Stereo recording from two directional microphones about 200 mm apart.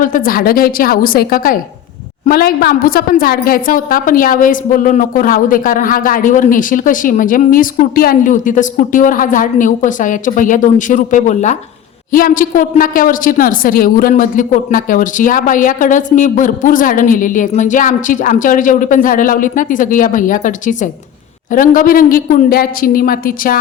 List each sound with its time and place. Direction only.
0.0 s a woman's voice: 45° left (ahead or behind)